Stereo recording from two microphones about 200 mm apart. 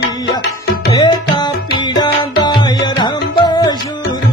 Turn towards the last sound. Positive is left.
turn(degrees=20)  # may be behind; listen again after turning